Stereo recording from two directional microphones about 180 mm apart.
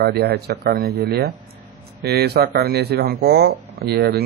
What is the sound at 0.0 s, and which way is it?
Speech, 60° right (ahead or behind).